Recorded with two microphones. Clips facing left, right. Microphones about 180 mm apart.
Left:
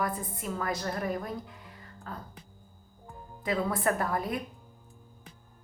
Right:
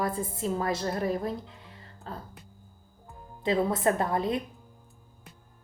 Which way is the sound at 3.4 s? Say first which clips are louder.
Right 4 dB; 25° right (ahead or behind).